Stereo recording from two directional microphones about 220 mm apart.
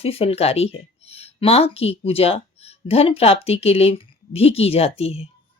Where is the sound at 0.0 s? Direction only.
25° left (ahead or behind).